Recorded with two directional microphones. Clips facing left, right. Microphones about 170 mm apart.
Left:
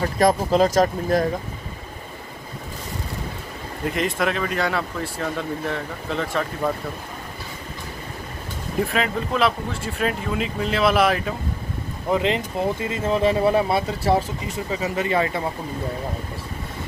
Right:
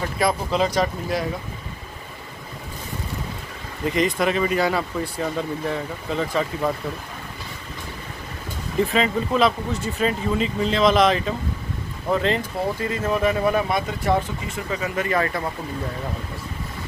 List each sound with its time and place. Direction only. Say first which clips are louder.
0.2 s speech: left 4 dB; 45° left (ahead or behind)
3.8 s speech: right 2 dB; centre (ahead or behind)
8.9 s speech: right 2 dB; 5° left (ahead or behind)
12.1 s speech: even; 15° left (ahead or behind)